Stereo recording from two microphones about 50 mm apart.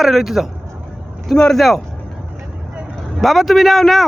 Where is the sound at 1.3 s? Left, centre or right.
Centre.